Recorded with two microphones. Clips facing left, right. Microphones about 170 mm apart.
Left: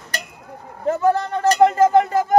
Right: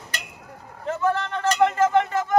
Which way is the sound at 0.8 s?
40° left (ahead or behind).